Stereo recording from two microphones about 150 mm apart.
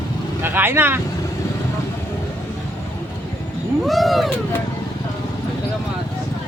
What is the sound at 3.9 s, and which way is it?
Speech, centre (ahead or behind).